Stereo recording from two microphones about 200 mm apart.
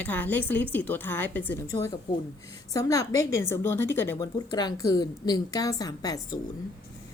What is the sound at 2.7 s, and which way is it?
Speech, 15° left (ahead or behind).